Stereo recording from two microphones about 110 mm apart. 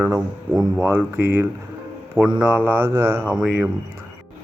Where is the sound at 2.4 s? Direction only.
15° right (ahead or behind).